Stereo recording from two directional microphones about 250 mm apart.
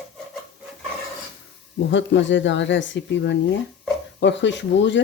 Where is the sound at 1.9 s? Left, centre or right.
Left.